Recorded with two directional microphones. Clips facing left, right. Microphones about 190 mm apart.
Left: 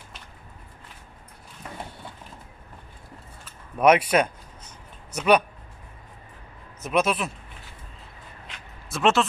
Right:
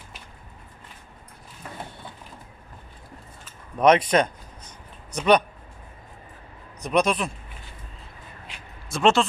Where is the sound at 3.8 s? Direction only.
10° left (ahead or behind).